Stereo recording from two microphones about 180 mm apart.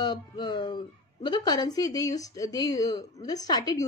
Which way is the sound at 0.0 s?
25° left (ahead or behind).